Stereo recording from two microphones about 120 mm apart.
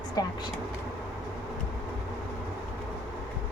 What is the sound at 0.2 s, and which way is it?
Speech, 35° left (ahead or behind).